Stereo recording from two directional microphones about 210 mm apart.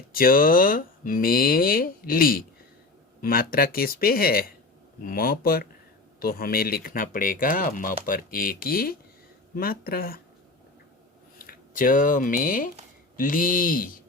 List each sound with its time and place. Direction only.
0.1 s speech: 45° left (ahead or behind)
11.3 s speech: 45° left (ahead or behind)